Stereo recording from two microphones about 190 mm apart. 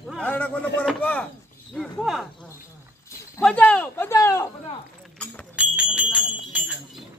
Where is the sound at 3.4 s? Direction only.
10° left (ahead or behind).